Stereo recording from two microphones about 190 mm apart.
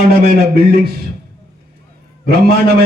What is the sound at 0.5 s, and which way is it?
Speech, 55° right (ahead or behind).